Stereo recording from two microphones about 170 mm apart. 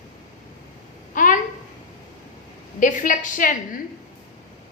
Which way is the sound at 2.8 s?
50° left (ahead or behind).